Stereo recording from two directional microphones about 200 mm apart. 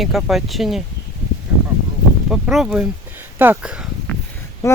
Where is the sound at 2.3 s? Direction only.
Centre (ahead or behind).